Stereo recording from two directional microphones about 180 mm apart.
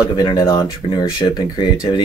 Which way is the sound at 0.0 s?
20° left (ahead or behind).